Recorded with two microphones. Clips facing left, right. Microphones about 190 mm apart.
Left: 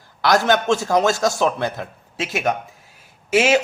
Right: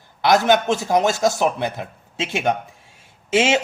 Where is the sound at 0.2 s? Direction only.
20° right (ahead or behind).